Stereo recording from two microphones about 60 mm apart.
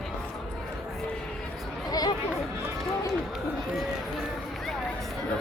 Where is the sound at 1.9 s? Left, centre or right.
Left.